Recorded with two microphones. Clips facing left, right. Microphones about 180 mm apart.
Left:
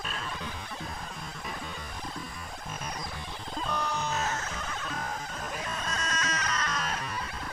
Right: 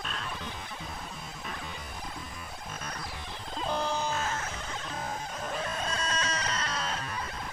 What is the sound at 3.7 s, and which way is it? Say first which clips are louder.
Music: right 2 dB; 30° right (ahead or behind).